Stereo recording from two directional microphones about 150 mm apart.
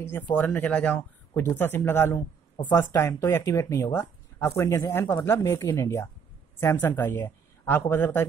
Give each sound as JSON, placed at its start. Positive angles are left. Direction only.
{"t": 0.0, "sound": "speech", "side_deg": 10}